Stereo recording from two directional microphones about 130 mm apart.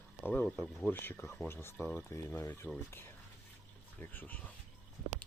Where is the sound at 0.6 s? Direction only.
Centre (ahead or behind).